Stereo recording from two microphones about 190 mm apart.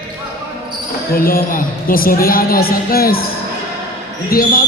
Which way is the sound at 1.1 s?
50° left (ahead or behind).